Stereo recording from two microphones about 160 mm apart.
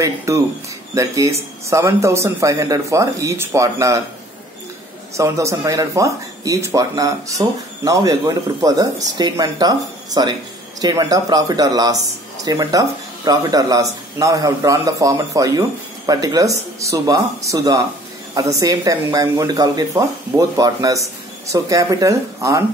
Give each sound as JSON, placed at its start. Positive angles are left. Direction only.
{"t": 0.0, "sound": "speech", "side_deg": -20}
{"t": 5.1, "sound": "speech", "side_deg": -20}